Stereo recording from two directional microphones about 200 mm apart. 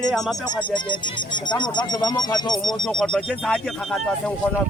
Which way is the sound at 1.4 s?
20° left (ahead or behind).